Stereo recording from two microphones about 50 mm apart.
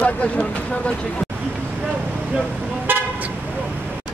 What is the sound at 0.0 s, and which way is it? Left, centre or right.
Speech, left.